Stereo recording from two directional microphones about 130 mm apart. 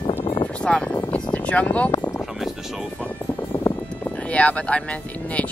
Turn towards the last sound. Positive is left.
turn(degrees=10)  # may be behind; listen again after turning